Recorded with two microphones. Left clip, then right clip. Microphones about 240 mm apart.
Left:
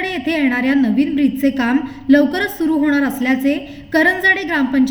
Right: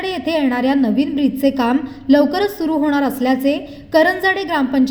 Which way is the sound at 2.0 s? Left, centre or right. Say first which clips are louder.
Even; right.